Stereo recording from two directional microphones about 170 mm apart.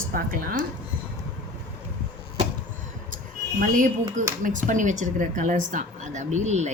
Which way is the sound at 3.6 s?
50° right (ahead or behind).